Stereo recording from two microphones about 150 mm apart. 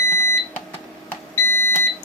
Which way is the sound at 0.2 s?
20° left (ahead or behind).